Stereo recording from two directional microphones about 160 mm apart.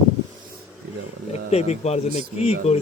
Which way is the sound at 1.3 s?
40° left (ahead or behind).